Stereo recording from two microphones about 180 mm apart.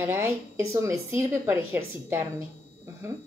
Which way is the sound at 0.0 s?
10° right (ahead or behind).